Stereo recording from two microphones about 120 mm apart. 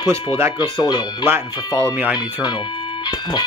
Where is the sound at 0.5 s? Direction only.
35° left (ahead or behind).